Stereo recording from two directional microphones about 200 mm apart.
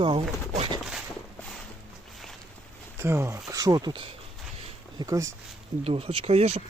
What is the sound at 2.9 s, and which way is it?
Speech, 10° right (ahead or behind).